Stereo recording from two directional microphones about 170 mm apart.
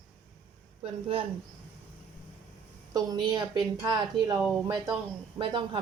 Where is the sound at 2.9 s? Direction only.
25° right (ahead or behind).